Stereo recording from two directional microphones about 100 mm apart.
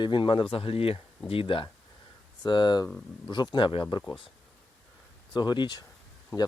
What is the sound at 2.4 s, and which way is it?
Speech, 45° left (ahead or behind).